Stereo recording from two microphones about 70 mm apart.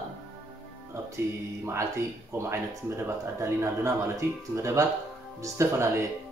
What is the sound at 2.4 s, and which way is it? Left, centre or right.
A man's voice, right.